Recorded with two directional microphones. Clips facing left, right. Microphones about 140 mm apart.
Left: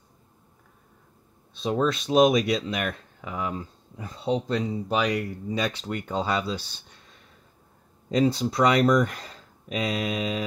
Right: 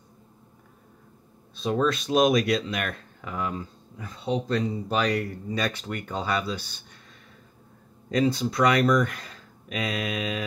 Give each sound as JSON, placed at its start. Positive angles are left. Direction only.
{"t": 1.6, "sound": "speech", "side_deg": 25}
{"t": 3.5, "sound": "speech", "side_deg": 25}
{"t": 4.6, "sound": "speech", "side_deg": 15}
{"t": 8.1, "sound": "speech", "side_deg": 30}